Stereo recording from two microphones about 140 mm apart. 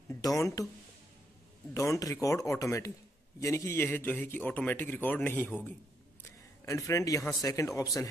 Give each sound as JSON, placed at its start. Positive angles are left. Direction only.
{"t": 0.1, "sound": "speech", "side_deg": 25}
{"t": 1.7, "sound": "a man's voice", "side_deg": 20}